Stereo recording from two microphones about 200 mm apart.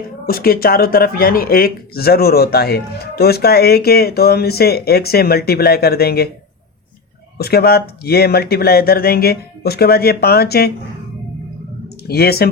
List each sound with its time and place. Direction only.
0.3 s speech: 50° left (ahead or behind)
7.3 s speech: 50° left (ahead or behind)
12.0 s speech: 50° left (ahead or behind)